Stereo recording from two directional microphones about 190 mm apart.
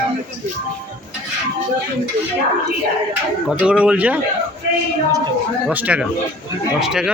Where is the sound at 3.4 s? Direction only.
5° right (ahead or behind).